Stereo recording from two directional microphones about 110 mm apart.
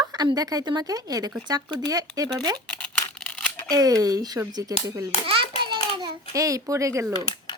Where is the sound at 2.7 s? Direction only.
10° left (ahead or behind).